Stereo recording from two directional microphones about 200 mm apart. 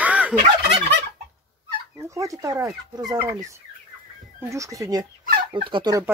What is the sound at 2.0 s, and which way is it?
Speech, 15° right (ahead or behind).